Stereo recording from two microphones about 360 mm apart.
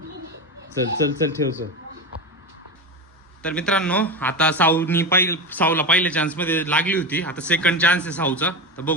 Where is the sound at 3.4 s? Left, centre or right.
Centre.